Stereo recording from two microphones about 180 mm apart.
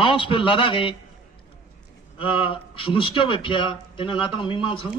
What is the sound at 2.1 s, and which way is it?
A man's voice, 30° left (ahead or behind).